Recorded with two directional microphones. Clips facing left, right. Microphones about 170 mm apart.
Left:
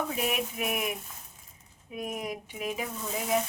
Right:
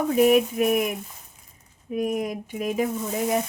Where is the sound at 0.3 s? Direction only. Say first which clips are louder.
Right 12 dB; 40° right (ahead or behind).